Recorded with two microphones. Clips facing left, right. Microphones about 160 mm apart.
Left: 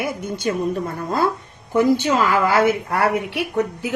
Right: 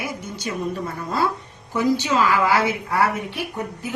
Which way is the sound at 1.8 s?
55° left (ahead or behind).